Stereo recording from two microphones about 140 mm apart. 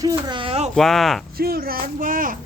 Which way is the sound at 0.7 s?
Centre (ahead or behind).